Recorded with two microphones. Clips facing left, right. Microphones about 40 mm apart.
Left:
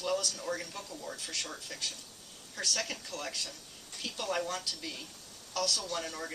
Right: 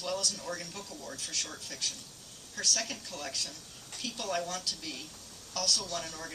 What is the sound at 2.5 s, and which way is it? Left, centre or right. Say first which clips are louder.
A woman's voice: right 1 dB; left.